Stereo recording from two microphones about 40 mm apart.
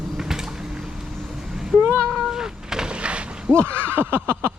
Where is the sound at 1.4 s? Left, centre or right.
Centre.